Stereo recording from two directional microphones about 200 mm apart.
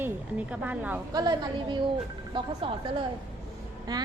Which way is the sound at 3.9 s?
20° right (ahead or behind).